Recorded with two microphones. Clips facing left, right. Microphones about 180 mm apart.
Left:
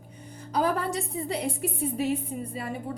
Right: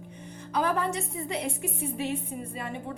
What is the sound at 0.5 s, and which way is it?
Speech, 35° left (ahead or behind).